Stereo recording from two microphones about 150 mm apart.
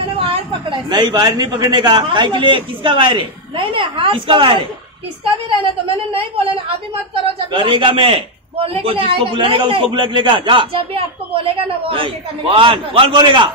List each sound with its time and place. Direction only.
0.2 s a man's voice: 35° right (ahead or behind)
6.1 s a man's voice: 35° right (ahead or behind)